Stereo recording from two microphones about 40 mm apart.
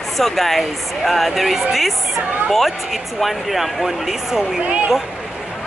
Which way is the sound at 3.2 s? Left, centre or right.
Centre.